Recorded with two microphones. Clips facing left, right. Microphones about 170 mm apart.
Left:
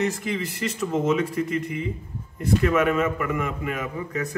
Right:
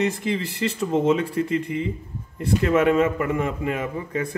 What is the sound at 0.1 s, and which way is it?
A man's voice, 30° right (ahead or behind).